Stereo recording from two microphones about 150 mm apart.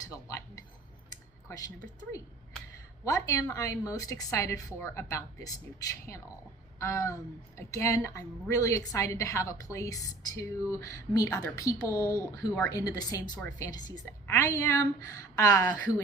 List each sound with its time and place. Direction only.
0.0 s speech: 20° left (ahead or behind)
3.0 s speech: 20° left (ahead or behind)